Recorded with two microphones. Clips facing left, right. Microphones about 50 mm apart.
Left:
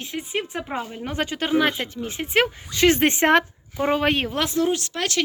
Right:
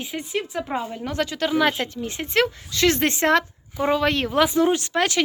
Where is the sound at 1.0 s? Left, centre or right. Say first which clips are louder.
Even; left.